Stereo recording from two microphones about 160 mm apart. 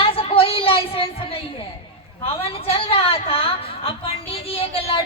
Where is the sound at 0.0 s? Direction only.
35° left (ahead or behind).